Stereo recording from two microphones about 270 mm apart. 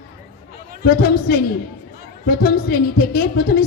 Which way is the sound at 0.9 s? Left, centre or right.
Left.